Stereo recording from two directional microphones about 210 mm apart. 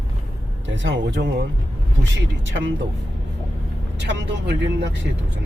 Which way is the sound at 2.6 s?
60° right (ahead or behind).